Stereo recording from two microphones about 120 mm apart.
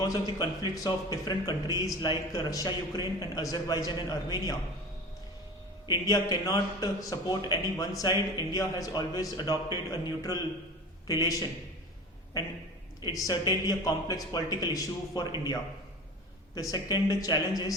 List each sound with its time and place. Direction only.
0.0 s a man's voice: 35° left (ahead or behind)
5.9 s a man's voice: 30° left (ahead or behind)
13.0 s a man's voice: 30° left (ahead or behind)
16.6 s a man's voice: 30° left (ahead or behind)